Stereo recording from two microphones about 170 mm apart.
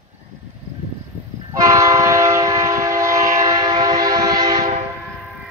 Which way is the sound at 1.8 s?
20° right (ahead or behind).